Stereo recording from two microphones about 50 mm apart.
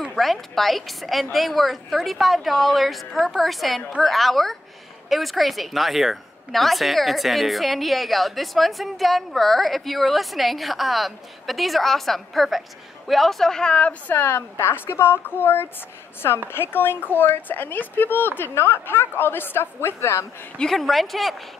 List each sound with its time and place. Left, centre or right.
0.1 s a woman's voice: centre; by 14.1 s left
14.1 s a woman's voice: left
20.7 s a woman's voice: centre